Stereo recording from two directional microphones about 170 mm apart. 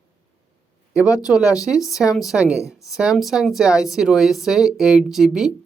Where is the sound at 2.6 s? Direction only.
20° left (ahead or behind).